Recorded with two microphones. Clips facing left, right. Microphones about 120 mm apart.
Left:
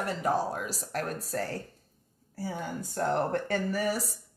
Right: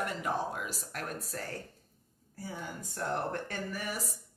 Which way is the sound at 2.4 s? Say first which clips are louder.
Left 6 dB; 60° left (ahead or behind).